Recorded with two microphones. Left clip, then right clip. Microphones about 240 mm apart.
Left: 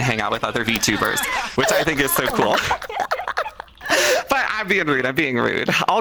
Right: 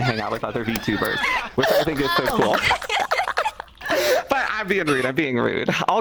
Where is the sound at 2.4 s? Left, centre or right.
Centre.